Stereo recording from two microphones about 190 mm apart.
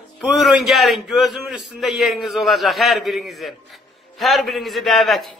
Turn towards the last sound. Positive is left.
turn(degrees=0)  # may be behind; listen again after turning